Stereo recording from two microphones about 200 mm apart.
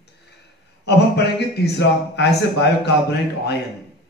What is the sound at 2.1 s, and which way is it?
Speech, 60° left (ahead or behind).